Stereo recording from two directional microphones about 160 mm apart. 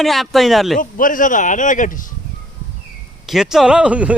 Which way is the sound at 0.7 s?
55° left (ahead or behind).